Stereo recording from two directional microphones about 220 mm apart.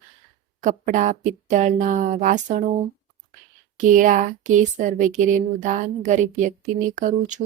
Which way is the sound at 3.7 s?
35° right (ahead or behind).